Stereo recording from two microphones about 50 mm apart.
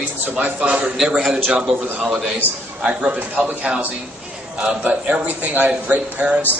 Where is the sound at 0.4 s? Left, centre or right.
Right.